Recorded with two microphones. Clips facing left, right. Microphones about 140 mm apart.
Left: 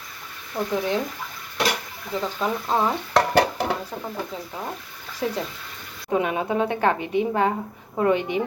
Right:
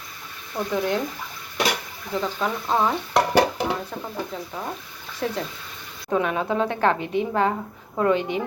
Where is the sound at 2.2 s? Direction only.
5° left (ahead or behind).